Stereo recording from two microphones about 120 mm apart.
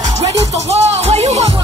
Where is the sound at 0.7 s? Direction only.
60° right (ahead or behind).